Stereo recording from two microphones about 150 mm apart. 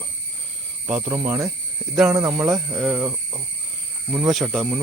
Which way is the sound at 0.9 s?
10° right (ahead or behind).